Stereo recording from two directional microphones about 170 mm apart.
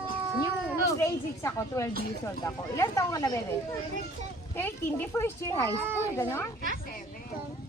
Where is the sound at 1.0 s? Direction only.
15° left (ahead or behind).